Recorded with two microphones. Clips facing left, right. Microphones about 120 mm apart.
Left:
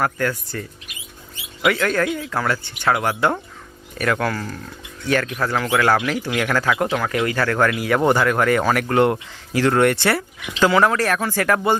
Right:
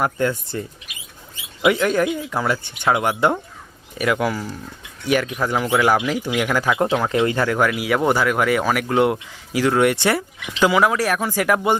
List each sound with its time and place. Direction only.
0.0 s speech: 25° right (ahead or behind)
1.6 s speech: 15° right (ahead or behind)
6.8 s speech: 25° right (ahead or behind)